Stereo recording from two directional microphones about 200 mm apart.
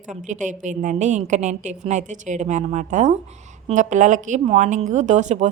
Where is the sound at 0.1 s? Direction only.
40° right (ahead or behind).